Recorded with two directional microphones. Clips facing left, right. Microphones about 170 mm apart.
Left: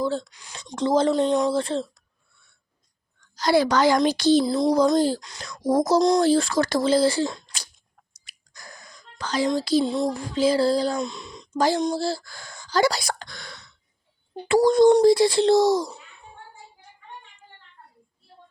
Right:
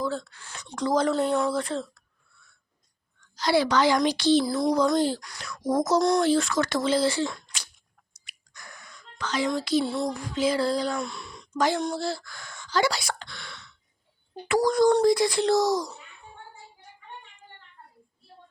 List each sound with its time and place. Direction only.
0.0 s speech: 30° left (ahead or behind)
0.3 s speech: 15° left (ahead or behind)
0.8 s speech: 25° left (ahead or behind)
3.3 s a woman's voice: 45° left (ahead or behind)
4.4 s speech: 20° left (ahead or behind)
4.9 s speech: 40° left (ahead or behind)
7.3 s a sound: 35° left (ahead or behind)
9.6 s speech: 35° left (ahead or behind)
9.8 s speech: 15° left (ahead or behind)
10.1 s speech: 30° left (ahead or behind)
10.9 s speech: 20° left (ahead or behind)
11.5 s speech: 35° left (ahead or behind)
14.4 s speech: 25° left (ahead or behind)